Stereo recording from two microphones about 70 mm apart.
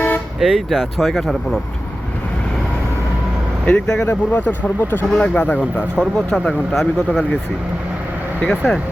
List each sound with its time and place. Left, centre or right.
0.3 s speech: centre
3.7 s speech: centre
4.0 s speech: left
5.1 s speech: centre
6.0 s speech: centre
8.4 s speech: centre